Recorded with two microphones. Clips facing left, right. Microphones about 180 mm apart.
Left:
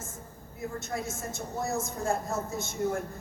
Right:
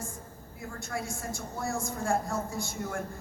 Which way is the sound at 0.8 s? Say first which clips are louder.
Right 2 dB; 20° left (ahead or behind).